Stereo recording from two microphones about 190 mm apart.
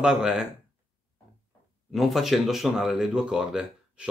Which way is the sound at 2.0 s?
Centre (ahead or behind).